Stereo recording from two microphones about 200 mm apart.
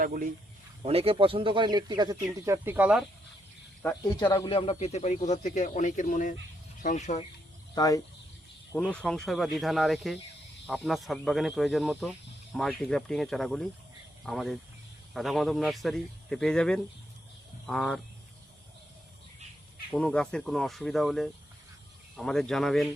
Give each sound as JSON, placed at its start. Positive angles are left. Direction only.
{"t": 0.0, "sound": "speech", "side_deg": -45}
{"t": 0.9, "sound": "speech", "side_deg": -30}
{"t": 4.2, "sound": "speech", "side_deg": 20}
{"t": 7.8, "sound": "speech", "side_deg": 15}
{"t": 8.7, "sound": "a man's voice", "side_deg": 5}
{"t": 19.9, "sound": "a man's voice", "side_deg": 5}